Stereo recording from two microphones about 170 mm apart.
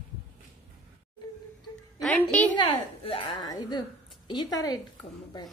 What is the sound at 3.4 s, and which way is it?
Speech, 25° left (ahead or behind).